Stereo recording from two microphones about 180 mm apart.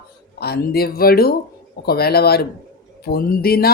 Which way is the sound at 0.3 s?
60° left (ahead or behind).